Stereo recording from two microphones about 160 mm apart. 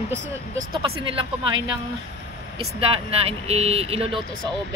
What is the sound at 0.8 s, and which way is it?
Speech, 35° right (ahead or behind).